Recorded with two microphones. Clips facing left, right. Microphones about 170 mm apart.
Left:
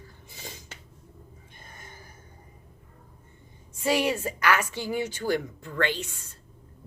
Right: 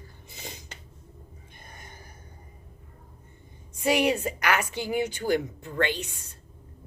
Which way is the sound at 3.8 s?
20° right (ahead or behind).